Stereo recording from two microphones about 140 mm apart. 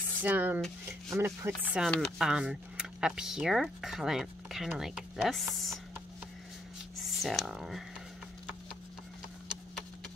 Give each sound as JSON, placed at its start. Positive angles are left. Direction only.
{"t": 0.2, "sound": "speech", "side_deg": -15}
{"t": 1.9, "sound": "speech", "side_deg": 5}
{"t": 7.0, "sound": "speech", "side_deg": 0}